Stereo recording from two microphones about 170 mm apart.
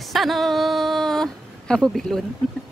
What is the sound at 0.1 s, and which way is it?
Speech, centre (ahead or behind).